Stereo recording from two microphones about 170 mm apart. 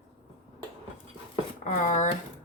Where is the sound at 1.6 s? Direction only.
50° left (ahead or behind).